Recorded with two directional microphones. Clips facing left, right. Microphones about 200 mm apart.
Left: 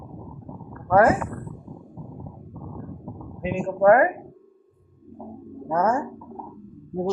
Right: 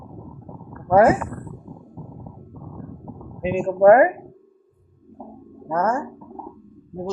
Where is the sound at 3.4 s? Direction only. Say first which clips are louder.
Right 4 dB; 25° right (ahead or behind).